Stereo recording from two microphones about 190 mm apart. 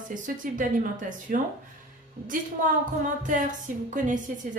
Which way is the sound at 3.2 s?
40° right (ahead or behind).